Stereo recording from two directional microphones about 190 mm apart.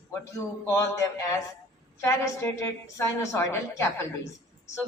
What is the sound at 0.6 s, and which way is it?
A woman's voice, 15° left (ahead or behind).